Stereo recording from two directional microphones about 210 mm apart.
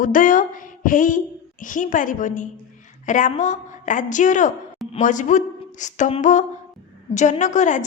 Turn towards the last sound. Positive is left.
turn(degrees=35)  # may be behind; listen again after turning